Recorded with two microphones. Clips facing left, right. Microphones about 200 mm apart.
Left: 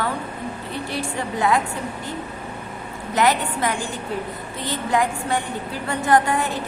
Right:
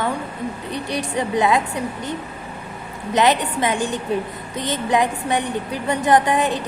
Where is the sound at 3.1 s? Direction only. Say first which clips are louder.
Right 2 dB; 20° right (ahead or behind).